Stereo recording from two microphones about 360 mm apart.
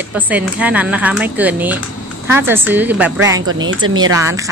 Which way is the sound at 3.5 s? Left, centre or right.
Right.